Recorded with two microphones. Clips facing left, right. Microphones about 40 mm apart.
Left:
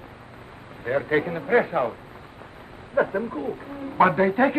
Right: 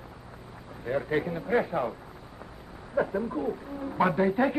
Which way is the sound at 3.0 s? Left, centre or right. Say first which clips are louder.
Left 4 dB; left.